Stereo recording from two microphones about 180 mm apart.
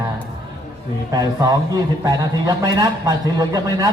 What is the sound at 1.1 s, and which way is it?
A man's voice, 20° right (ahead or behind).